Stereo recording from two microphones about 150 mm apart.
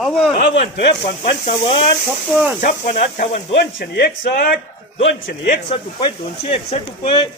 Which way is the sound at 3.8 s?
80° left.